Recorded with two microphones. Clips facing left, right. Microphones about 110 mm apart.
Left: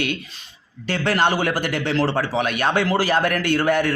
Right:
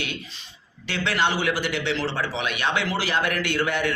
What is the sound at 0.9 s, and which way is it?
A man's voice, 45° left (ahead or behind).